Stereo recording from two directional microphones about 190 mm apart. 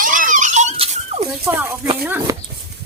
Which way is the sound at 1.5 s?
10° right (ahead or behind).